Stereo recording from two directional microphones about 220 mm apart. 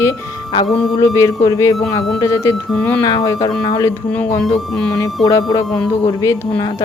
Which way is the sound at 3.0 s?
15° left (ahead or behind).